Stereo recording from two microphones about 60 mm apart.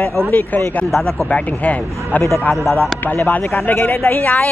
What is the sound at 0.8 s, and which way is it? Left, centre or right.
Speech, centre.